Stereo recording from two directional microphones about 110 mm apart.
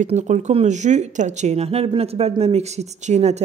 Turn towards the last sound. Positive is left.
turn(degrees=-85)